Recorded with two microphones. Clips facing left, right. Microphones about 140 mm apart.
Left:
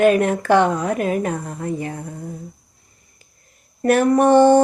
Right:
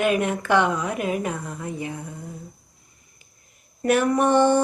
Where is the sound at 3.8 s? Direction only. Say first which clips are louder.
Left 5 dB; 40° left (ahead or behind).